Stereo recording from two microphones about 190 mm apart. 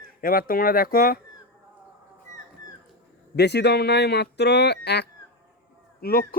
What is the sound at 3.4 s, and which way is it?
Speech, 60° left (ahead or behind).